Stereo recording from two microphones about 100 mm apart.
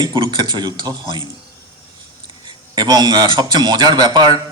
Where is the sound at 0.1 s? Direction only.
50° right (ahead or behind).